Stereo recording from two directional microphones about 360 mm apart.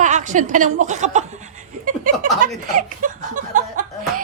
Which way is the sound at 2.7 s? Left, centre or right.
Right.